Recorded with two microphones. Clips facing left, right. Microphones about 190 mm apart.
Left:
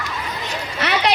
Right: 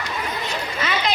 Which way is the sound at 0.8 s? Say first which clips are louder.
Left 5 dB; 70° left (ahead or behind).